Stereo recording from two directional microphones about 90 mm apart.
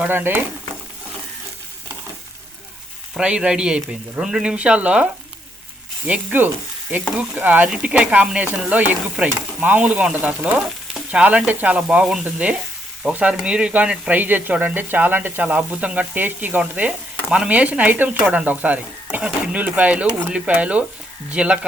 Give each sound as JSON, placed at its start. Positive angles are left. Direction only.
{"t": 0.1, "sound": "speech", "side_deg": -25}
{"t": 3.2, "sound": "speech", "side_deg": -10}
{"t": 6.1, "sound": "speech", "side_deg": -20}